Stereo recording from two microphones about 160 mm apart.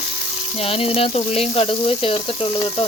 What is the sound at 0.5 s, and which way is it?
Speech, 35° left (ahead or behind).